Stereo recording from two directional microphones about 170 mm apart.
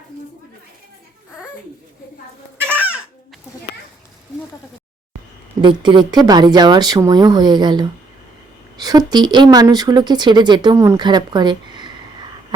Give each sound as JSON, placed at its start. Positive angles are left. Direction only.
{"t": 2.6, "sound": "chicken", "side_deg": -10}
{"t": 5.6, "sound": "speech", "side_deg": -30}